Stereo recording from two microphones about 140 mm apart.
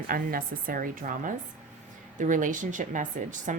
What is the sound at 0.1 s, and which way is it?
A woman's voice, 90° right.